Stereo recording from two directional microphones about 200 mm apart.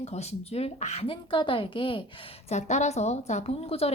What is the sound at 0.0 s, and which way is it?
A woman's voice, 30° left (ahead or behind).